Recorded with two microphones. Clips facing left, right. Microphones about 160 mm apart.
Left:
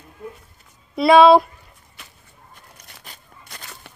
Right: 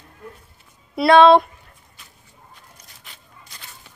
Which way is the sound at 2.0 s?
75° left (ahead or behind).